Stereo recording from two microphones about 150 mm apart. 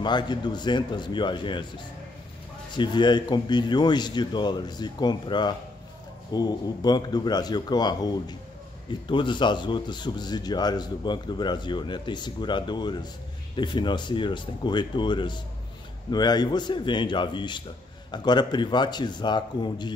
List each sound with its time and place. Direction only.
0.0 s speech: 30° left (ahead or behind)
2.7 s a man's voice: 30° left (ahead or behind)